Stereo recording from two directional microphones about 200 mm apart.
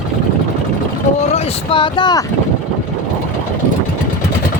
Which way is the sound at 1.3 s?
25° left (ahead or behind).